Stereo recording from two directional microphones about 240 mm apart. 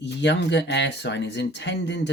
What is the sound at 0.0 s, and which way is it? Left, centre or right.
Speech, left.